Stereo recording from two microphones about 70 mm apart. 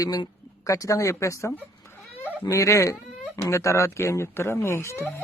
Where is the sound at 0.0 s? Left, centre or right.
Left.